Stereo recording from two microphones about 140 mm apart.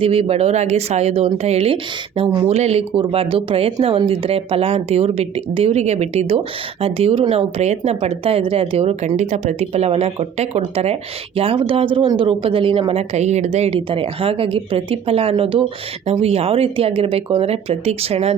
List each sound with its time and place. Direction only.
0.0 s speech: 45° right (ahead or behind)
12.9 s speech: 50° right (ahead or behind)